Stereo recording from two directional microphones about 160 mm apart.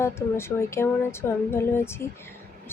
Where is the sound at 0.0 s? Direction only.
15° left (ahead or behind).